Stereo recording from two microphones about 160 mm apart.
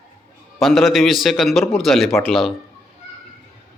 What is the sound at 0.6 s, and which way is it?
A man's voice, centre (ahead or behind).